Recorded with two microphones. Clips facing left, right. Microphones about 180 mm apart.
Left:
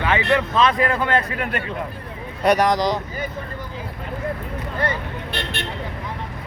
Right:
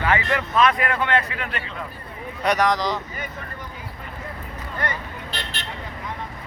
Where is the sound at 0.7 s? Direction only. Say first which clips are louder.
Left 2 dB; 35° left (ahead or behind); by 1.7 s 50° left (ahead or behind).